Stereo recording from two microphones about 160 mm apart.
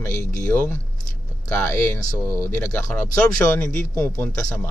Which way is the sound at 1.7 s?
15° left (ahead or behind).